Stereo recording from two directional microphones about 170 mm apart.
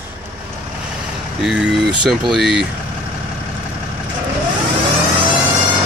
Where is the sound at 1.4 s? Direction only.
5° right (ahead or behind).